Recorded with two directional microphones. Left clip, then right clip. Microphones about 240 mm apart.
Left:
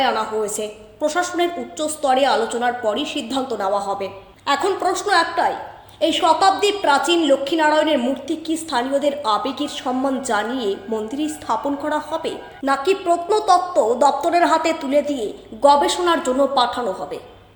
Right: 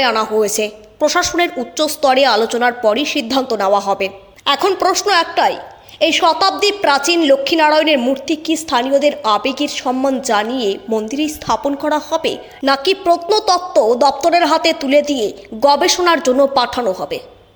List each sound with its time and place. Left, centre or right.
0.0 s a woman's voice: right
10.5 s a woman's voice: right
11.4 s a woman's voice: right